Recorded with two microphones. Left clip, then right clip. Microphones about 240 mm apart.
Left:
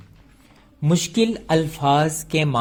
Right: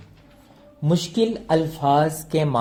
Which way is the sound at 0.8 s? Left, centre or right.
Left.